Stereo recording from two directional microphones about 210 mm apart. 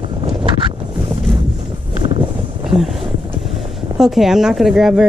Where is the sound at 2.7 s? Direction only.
Centre (ahead or behind).